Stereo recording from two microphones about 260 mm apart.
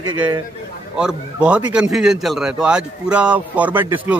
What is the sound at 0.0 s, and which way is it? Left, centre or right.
Speech, centre.